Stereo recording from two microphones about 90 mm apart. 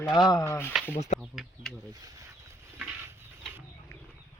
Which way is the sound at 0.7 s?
5° right (ahead or behind).